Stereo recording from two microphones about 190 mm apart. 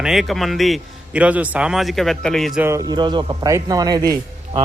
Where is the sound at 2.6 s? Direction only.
15° right (ahead or behind).